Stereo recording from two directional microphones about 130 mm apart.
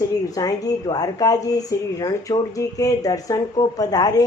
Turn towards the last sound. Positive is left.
turn(degrees=30)  # may be behind; listen again after turning